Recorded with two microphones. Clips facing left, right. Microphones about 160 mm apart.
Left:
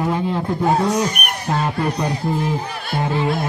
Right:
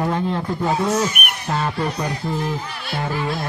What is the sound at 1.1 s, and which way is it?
Speech, 40° left (ahead or behind).